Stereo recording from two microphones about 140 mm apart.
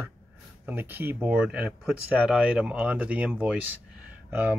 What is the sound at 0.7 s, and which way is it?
Speech, 15° right (ahead or behind).